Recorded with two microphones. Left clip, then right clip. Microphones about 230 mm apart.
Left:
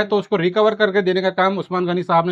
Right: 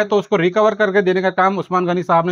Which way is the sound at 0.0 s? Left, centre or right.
Right.